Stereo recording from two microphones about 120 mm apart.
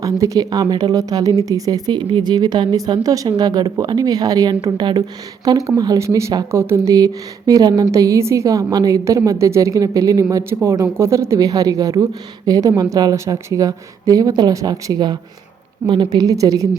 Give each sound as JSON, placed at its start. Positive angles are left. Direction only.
{"t": 0.0, "sound": "speech", "side_deg": -30}